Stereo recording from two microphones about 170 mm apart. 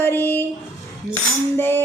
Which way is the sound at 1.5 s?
15° left (ahead or behind).